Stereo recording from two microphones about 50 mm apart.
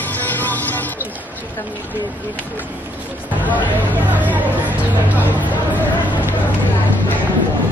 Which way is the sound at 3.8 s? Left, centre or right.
Right.